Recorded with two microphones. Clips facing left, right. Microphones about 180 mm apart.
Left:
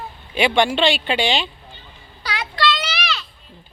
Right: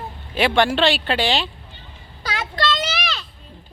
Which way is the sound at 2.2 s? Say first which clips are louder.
Left 1 dB; 45° right (ahead or behind).